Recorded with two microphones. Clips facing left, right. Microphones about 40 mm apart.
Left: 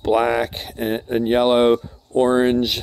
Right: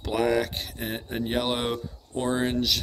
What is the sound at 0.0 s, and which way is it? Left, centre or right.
Speech, left.